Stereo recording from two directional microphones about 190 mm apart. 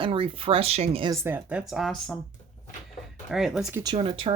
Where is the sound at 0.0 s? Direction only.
30° right (ahead or behind).